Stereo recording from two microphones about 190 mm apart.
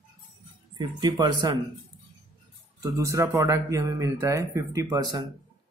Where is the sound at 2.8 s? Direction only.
15° right (ahead or behind).